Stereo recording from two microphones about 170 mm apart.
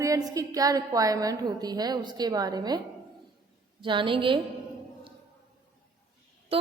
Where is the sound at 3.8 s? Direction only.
30° right (ahead or behind).